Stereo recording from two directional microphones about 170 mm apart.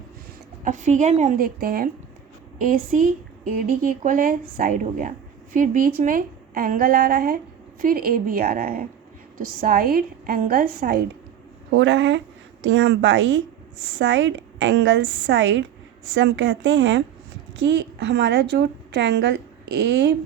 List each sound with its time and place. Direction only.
0.6 s a woman's voice: 45° right (ahead or behind); by 11.0 s 65° right (ahead or behind)
11.8 s a woman's voice: 90° right